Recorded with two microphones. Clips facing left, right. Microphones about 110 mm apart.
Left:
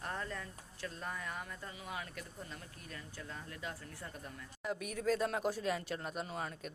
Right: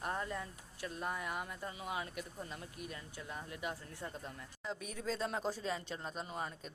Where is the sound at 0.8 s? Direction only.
15° right (ahead or behind).